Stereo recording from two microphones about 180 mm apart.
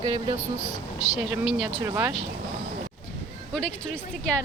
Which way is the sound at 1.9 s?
15° right (ahead or behind).